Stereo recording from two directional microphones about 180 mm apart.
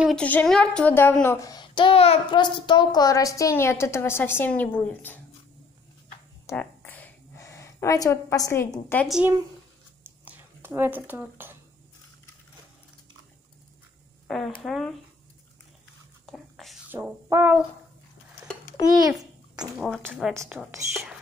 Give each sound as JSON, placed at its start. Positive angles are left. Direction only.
{"t": 0.0, "sound": "a woman's voice", "side_deg": 5}
{"t": 6.4, "sound": "a sound", "side_deg": 10}
{"t": 9.0, "sound": "speech", "side_deg": 0}
{"t": 14.2, "sound": "speech", "side_deg": 0}
{"t": 16.3, "sound": "whispering", "side_deg": 0}
{"t": 16.9, "sound": "brass instrument", "side_deg": -10}
{"t": 19.8, "sound": "speech", "side_deg": 5}
{"t": 20.3, "sound": "brass instrument", "side_deg": -15}